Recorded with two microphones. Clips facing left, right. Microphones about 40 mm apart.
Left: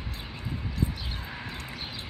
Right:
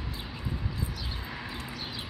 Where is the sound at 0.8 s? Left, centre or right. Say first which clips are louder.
Left 6 dB; left.